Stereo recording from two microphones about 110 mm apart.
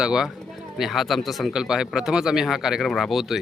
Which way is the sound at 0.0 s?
5° right (ahead or behind).